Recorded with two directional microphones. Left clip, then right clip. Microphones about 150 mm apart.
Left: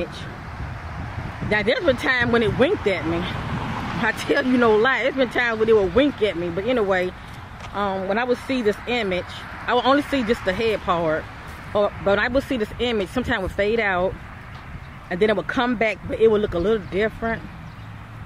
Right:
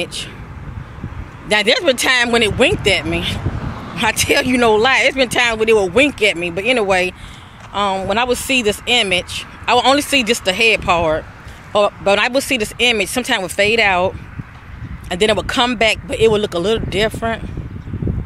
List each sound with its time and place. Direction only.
0.0 s speech: 20° right (ahead or behind)
1.5 s speech: 20° right (ahead or behind)